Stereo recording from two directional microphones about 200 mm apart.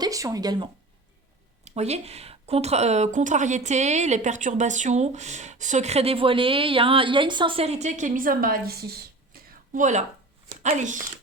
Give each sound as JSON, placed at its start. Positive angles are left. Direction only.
{"t": 0.0, "sound": "speech", "side_deg": -15}
{"t": 1.6, "sound": "a woman's voice", "side_deg": -35}